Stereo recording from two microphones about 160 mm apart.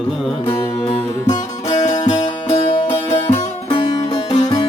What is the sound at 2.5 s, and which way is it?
Music, 40° left (ahead or behind).